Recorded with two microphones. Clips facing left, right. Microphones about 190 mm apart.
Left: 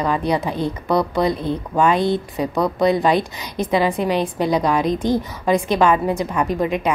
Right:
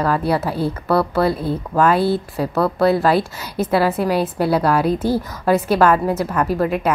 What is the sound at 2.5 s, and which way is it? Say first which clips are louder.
Speech: right 2 dB; 15° left (ahead or behind).